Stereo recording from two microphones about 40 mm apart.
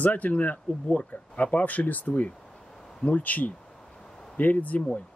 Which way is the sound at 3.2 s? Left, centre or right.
Left.